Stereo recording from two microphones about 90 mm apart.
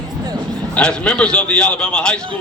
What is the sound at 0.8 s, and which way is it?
A man's voice, 10° left (ahead or behind).